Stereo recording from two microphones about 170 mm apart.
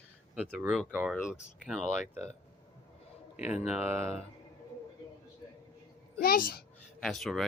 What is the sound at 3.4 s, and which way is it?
Speech, 40° left (ahead or behind).